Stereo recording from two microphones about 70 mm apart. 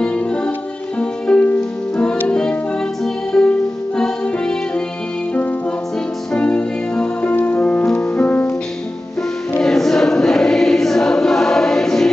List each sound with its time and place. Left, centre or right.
0.0 s music: centre
9.6 s choir: centre